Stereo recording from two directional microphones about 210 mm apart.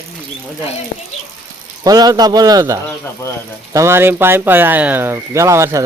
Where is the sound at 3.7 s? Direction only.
15° right (ahead or behind).